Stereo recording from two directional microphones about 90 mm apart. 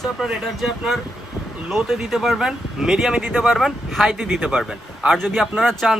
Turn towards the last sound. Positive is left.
turn(degrees=5)  # may be behind; listen again after turning